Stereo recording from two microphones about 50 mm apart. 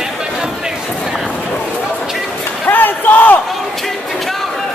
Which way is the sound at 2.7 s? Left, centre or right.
Left.